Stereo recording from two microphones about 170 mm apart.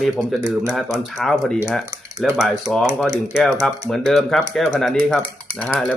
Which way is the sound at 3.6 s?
Centre (ahead or behind).